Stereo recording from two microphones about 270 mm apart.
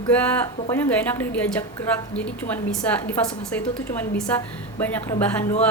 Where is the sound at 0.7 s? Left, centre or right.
Centre.